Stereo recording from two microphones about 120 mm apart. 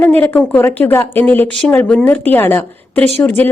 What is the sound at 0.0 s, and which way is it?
A woman's voice, 15° left (ahead or behind).